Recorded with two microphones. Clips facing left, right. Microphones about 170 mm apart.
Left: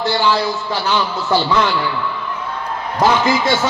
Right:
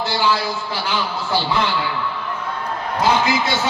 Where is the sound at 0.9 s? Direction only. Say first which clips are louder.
Left 6 dB; 70° left (ahead or behind).